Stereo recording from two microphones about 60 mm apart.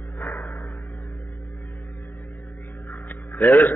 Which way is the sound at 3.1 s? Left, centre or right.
Left.